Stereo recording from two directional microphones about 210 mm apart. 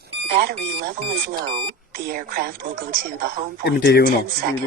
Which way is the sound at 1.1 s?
25° right (ahead or behind).